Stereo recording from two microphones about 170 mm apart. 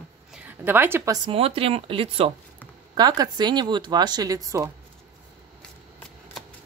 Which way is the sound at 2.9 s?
25° right (ahead or behind).